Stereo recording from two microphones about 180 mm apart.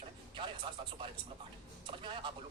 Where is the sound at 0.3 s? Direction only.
30° right (ahead or behind).